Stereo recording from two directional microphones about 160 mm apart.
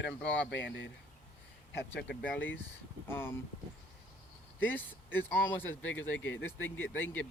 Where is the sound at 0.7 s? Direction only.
90° left.